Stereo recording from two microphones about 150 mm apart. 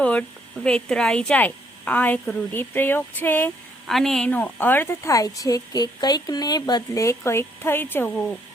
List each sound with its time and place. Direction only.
0.0 s speech: 10° left (ahead or behind)
3.8 s a woman's voice: 5° left (ahead or behind)